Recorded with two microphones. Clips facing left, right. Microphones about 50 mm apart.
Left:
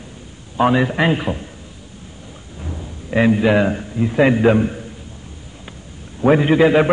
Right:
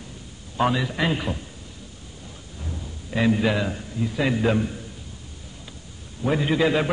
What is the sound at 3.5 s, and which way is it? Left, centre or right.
A man's voice, left.